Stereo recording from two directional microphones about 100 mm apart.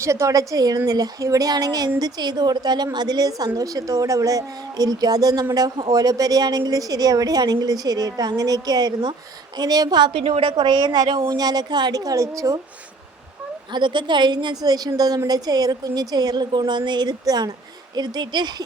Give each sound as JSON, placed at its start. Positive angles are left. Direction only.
{"t": 0.0, "sound": "a woman's voice", "side_deg": -30}
{"t": 10.2, "sound": "a woman's voice", "side_deg": -90}
{"t": 10.6, "sound": "a woman's voice", "side_deg": -45}
{"t": 13.7, "sound": "a woman's voice", "side_deg": -50}